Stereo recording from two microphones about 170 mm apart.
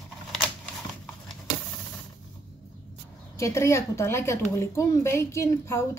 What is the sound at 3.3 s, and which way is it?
A woman's voice, 20° left (ahead or behind).